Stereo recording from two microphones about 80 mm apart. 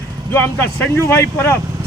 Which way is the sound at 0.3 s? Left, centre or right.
Left.